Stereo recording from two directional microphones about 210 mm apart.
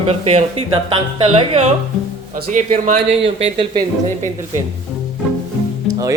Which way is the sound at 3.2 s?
25° right (ahead or behind).